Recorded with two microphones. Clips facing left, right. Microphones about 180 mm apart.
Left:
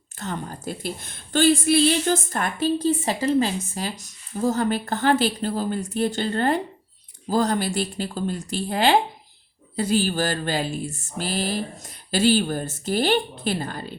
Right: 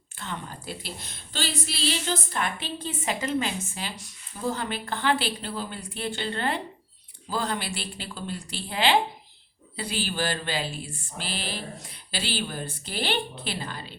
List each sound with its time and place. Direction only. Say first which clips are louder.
0.2 s a woman's voice: left 5 dB; 45° left (ahead or behind)